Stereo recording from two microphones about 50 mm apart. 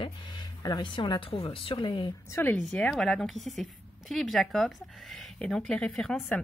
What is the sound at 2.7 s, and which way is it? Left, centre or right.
Speech, centre.